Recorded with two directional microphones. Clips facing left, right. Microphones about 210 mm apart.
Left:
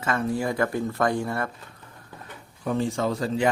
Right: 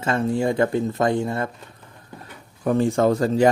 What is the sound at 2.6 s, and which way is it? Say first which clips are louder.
Speech: right 7 dB; 50° right (ahead or behind).